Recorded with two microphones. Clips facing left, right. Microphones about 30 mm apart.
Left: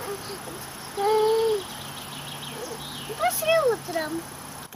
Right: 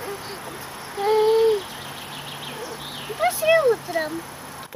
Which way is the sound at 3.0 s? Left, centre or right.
Centre.